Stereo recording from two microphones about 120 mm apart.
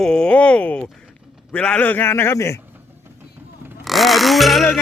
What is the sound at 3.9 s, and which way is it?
Speech, centre (ahead or behind).